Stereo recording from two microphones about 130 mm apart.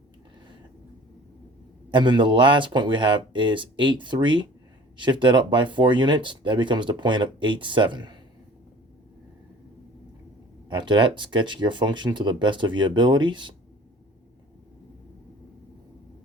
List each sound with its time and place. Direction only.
1.9 s speech: 35° right (ahead or behind)
10.7 s speech: 35° right (ahead or behind)